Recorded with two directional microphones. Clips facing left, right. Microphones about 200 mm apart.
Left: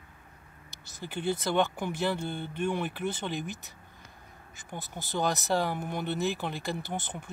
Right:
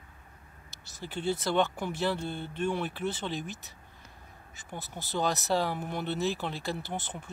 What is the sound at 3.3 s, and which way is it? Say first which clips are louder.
Speech: left 1 dB; 50° left (ahead or behind).